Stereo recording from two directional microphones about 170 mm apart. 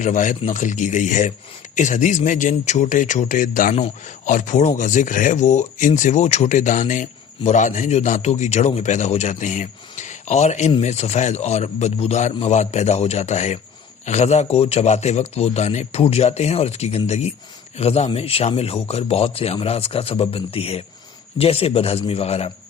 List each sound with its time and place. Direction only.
0.0 s a man's voice: 45° left (ahead or behind)